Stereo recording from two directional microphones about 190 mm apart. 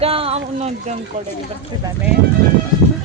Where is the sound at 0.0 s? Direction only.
30° right (ahead or behind).